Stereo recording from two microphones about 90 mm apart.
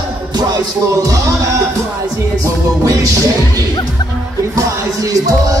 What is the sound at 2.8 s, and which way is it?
Speech, 40° right (ahead or behind).